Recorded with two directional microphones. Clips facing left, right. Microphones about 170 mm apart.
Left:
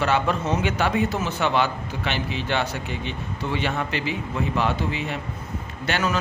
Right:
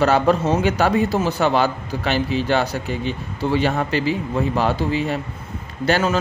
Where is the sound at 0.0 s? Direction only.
40° right (ahead or behind).